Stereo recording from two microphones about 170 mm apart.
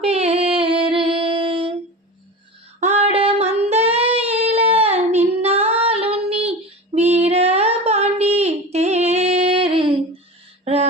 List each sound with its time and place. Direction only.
0.0 s music: 35° right (ahead or behind)
2.8 s female singing: 40° right (ahead or behind)
4.9 s child singing: 40° right (ahead or behind)
9.7 s a sound: 30° right (ahead or behind)